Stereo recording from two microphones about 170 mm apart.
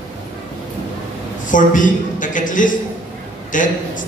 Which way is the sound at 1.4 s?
50° left (ahead or behind).